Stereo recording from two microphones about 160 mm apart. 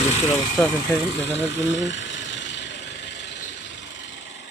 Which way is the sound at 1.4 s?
90° left.